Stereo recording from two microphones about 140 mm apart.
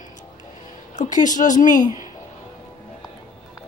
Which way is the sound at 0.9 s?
65° left (ahead or behind).